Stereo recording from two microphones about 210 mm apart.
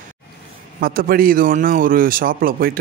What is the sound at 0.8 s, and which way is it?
A man's voice, 45° right (ahead or behind).